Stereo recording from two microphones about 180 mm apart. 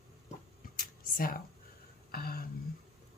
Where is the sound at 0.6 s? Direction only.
50° left (ahead or behind).